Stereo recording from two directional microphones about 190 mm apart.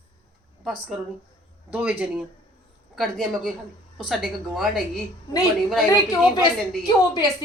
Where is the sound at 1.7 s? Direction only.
10° right (ahead or behind).